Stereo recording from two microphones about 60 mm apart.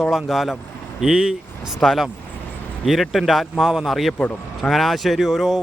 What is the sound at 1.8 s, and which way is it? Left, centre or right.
Speech, centre.